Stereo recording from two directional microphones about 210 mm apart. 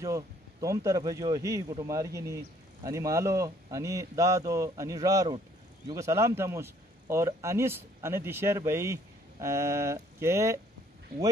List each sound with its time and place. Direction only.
0.0 s speech: 15° right (ahead or behind)